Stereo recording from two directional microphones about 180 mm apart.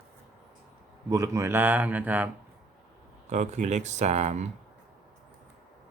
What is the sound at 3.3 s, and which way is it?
Speech, 40° right (ahead or behind).